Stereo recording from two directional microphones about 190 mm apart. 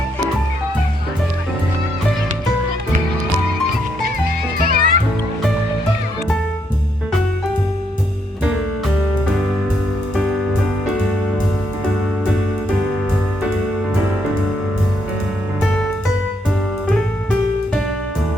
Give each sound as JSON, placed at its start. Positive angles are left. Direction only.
{"t": 4.6, "sound": "music", "side_deg": -45}
{"t": 15.6, "sound": "music", "side_deg": 5}